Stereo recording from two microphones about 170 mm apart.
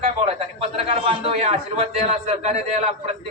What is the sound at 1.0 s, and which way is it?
A man's voice, 35° right (ahead or behind).